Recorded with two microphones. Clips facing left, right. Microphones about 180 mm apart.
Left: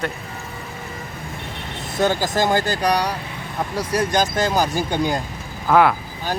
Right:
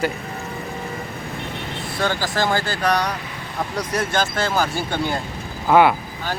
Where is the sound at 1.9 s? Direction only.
20° left (ahead or behind).